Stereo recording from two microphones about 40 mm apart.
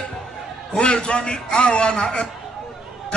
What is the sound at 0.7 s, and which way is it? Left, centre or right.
A man's voice, left.